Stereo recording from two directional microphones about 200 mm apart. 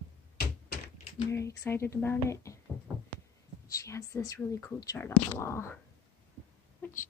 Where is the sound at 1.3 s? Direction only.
15° left (ahead or behind).